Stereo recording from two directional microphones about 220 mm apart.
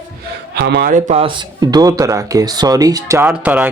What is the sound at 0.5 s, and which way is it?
Speech, 45° right (ahead or behind).